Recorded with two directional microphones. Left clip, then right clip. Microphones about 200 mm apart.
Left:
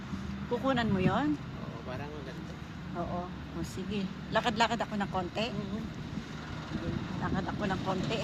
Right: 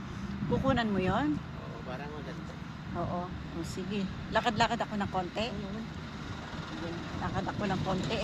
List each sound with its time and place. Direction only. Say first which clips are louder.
0.5 s speech: even; 5° left (ahead or behind)
3.6 s speech: right 1 dB; 5° left (ahead or behind)
7.3 s speech: right 1 dB; 5° left (ahead or behind)